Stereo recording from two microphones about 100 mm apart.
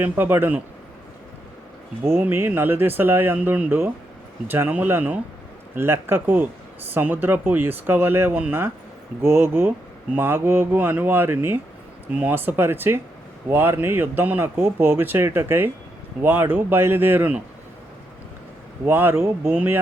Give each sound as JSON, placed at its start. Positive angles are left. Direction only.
{"t": 0.0, "sound": "speech", "side_deg": -20}
{"t": 2.0, "sound": "speech", "side_deg": -20}
{"t": 18.9, "sound": "speech", "side_deg": -20}